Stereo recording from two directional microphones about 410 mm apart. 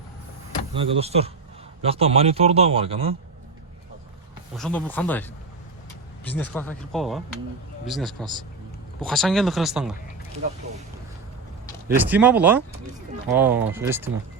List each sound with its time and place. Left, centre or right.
0.7 s speech: centre
4.5 s speech: centre
6.2 s speech: centre
11.9 s speech: centre